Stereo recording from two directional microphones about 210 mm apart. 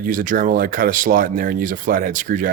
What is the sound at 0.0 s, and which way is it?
Speech, 40° right (ahead or behind).